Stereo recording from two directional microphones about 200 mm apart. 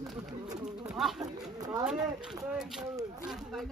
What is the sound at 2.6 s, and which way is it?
Speech, centre (ahead or behind).